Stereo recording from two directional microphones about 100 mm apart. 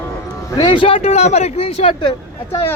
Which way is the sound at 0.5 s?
50° left (ahead or behind).